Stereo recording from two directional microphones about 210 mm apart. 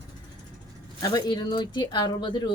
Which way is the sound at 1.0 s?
20° left (ahead or behind).